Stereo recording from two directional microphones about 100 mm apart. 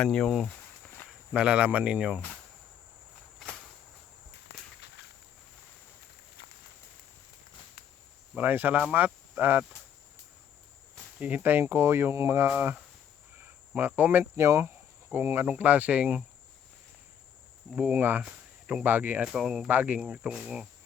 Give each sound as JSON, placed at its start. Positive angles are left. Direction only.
{"t": 0.0, "sound": "speech", "side_deg": 5}
{"t": 1.3, "sound": "speech", "side_deg": -10}
{"t": 8.4, "sound": "speech", "side_deg": -20}
{"t": 11.2, "sound": "speech", "side_deg": -15}
{"t": 13.7, "sound": "speech", "side_deg": -20}
{"t": 17.7, "sound": "speech", "side_deg": -10}
{"t": 19.3, "sound": "speech", "side_deg": -5}